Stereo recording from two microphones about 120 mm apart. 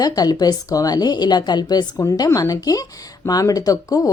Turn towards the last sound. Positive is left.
turn(degrees=30)  # may be behind; listen again after turning